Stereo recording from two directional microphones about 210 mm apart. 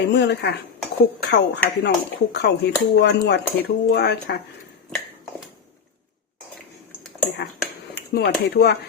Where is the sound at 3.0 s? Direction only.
55° left (ahead or behind).